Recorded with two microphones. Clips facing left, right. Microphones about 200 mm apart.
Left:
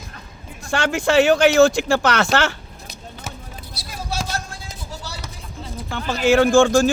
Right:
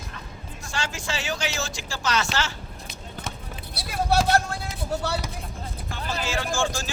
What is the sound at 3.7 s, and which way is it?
Vehicle, 60° right (ahead or behind).